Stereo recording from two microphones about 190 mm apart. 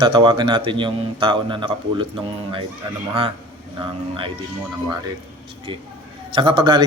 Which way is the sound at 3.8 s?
30° right (ahead or behind).